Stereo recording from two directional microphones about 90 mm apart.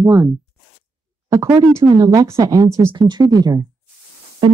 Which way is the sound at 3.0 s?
55° right (ahead or behind).